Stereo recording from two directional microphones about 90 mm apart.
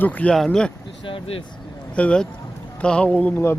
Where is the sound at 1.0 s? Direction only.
85° left.